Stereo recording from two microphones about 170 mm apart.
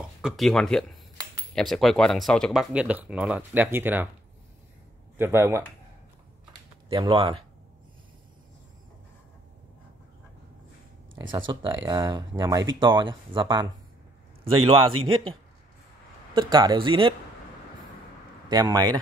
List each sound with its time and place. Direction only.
0.2 s speech: centre (ahead or behind)
5.1 s speech: 15° right (ahead or behind)
6.9 s a man's voice: 30° right (ahead or behind)
11.3 s a man's voice: 30° right (ahead or behind)
16.3 s speech: 25° right (ahead or behind)
18.5 s speech: 20° right (ahead or behind)